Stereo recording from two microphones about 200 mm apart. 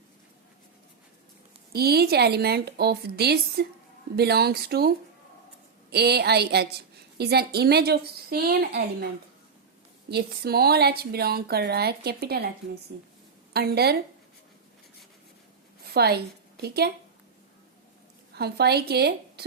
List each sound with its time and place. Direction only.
1.7 s a woman's voice: 50° right (ahead or behind)
10.1 s a woman's voice: 50° right (ahead or behind)
15.8 s a woman's voice: 50° right (ahead or behind)
18.3 s a woman's voice: 55° right (ahead or behind)